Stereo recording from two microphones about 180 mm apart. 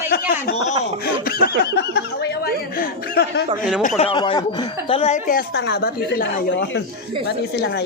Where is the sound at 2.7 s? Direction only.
60° left (ahead or behind).